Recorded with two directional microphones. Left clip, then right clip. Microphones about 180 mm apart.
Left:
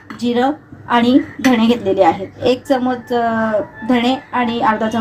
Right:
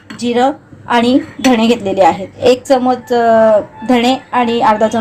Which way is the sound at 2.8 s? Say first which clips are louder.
Right 6 dB; 40° right (ahead or behind).